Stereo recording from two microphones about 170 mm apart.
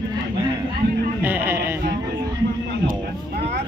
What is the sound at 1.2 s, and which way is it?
Music, 10° right (ahead or behind).